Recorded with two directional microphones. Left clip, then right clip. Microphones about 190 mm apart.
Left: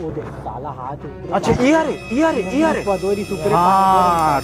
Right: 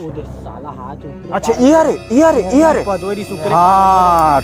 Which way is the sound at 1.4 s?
50° right (ahead or behind).